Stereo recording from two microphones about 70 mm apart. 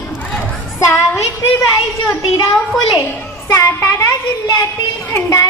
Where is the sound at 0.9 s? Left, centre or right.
Left.